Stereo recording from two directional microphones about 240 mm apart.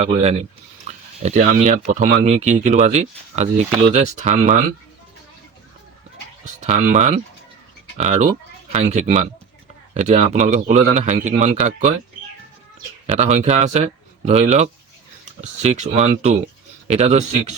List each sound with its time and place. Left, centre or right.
0.0 s speech: right
6.6 s speech: right
13.1 s speech: right